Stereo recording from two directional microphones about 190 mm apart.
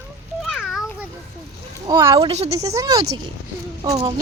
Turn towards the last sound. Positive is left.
turn(degrees=-15)  # may be behind; listen again after turning